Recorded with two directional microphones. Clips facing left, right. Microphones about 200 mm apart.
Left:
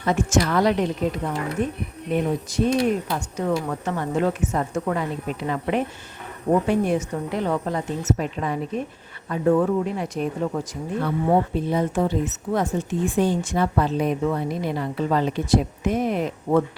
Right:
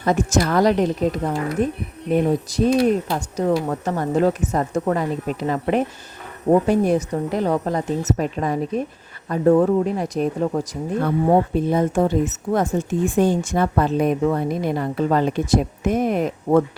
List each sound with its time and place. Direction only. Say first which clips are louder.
0.0 s speech: right 2 dB; 40° right (ahead or behind)